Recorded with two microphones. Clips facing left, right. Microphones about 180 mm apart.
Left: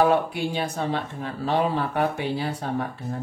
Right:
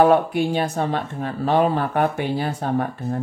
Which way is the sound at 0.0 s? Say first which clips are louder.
Right 5 dB; 55° right (ahead or behind).